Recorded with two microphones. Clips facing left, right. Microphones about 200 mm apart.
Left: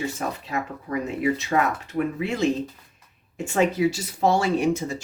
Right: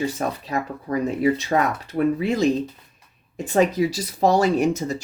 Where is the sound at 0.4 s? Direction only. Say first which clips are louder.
Right 3 dB; 35° right (ahead or behind).